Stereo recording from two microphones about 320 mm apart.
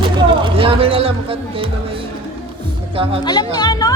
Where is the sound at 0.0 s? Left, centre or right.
Centre.